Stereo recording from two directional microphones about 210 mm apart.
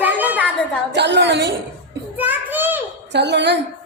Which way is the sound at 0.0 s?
10° right (ahead or behind).